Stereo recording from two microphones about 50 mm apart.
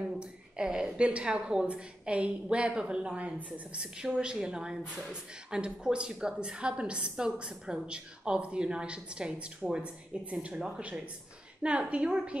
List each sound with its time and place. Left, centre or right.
0.0 s a woman's voice: centre